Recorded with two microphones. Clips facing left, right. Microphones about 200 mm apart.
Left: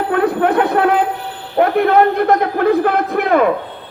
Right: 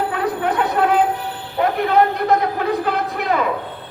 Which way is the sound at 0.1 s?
55° left (ahead or behind).